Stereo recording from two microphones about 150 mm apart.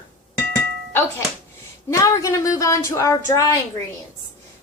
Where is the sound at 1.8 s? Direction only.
20° left (ahead or behind).